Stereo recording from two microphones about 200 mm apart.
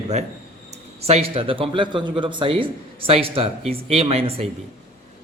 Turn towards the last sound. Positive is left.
turn(degrees=-30)  # may be behind; listen again after turning